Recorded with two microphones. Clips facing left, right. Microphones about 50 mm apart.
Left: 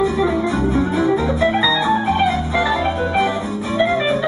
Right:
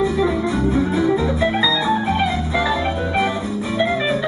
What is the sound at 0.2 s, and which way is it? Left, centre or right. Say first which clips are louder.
Organ: left 1 dB; centre.